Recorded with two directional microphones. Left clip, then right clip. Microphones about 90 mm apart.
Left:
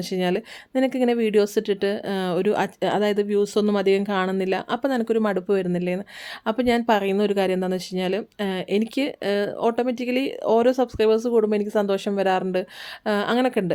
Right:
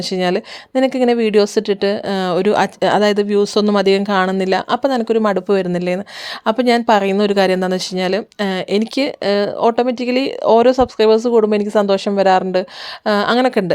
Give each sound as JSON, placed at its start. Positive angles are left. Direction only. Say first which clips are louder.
{"t": 0.0, "sound": "speech", "louder": "right 7 dB", "side_deg": -40}